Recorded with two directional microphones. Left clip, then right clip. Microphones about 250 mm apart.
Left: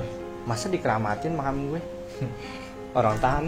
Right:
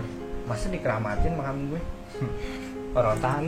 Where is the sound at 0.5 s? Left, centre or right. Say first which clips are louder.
Left 3 dB; left.